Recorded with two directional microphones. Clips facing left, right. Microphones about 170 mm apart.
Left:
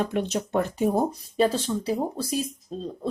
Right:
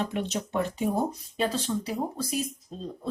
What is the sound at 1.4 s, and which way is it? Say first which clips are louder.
Speech: left 5 dB; 30° left (ahead or behind).